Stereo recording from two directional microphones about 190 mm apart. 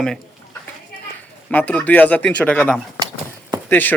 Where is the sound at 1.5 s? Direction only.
5° left (ahead or behind).